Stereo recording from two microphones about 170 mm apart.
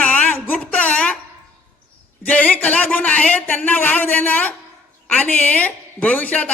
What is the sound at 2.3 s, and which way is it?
A man's voice, 10° left (ahead or behind).